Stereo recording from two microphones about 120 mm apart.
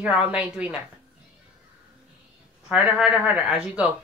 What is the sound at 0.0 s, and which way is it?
Speech, 10° right (ahead or behind).